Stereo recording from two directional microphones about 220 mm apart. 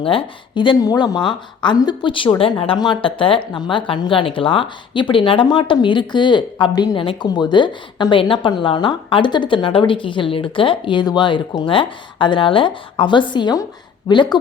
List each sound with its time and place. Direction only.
0.0 s speech: 25° left (ahead or behind)